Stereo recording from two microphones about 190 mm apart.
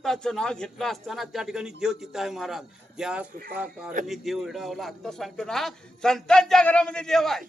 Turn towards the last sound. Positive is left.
turn(degrees=0)  # may be behind; listen again after turning